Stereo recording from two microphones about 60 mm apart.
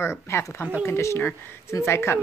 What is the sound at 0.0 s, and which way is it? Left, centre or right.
A woman's voice, left.